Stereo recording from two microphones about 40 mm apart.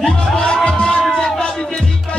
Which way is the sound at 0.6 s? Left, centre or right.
Left.